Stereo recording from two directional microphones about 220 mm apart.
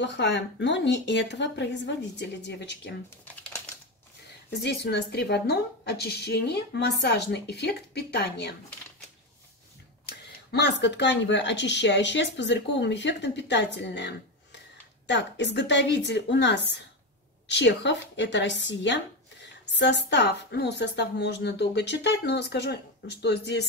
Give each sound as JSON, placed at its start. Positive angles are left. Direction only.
{"t": 0.0, "sound": "speech", "side_deg": 55}
{"t": 4.5, "sound": "speech", "side_deg": 50}
{"t": 10.0, "sound": "speech", "side_deg": 50}
{"t": 19.6, "sound": "a sound", "side_deg": 50}
{"t": 20.1, "sound": "speech", "side_deg": 50}